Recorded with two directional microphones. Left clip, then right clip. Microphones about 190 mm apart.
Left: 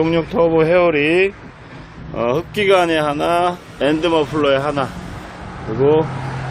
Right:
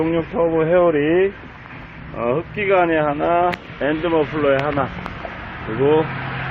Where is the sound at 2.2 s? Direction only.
45° left (ahead or behind); by 4.9 s 25° left (ahead or behind).